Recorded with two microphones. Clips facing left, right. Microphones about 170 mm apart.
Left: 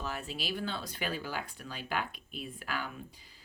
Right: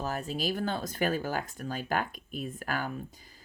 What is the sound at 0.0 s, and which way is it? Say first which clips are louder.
Speech: right 6 dB; 40° right (ahead or behind).